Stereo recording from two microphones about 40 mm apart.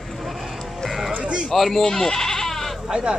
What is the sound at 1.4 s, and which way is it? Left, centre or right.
Bleat, centre.